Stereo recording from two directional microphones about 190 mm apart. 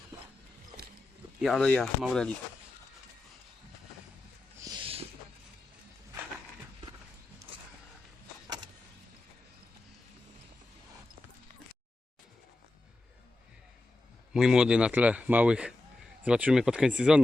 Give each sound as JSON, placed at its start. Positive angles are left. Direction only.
{"t": 1.4, "sound": "a man's voice", "side_deg": 0}
{"t": 4.6, "sound": "a sound", "side_deg": -25}
{"t": 14.3, "sound": "a man's voice", "side_deg": -5}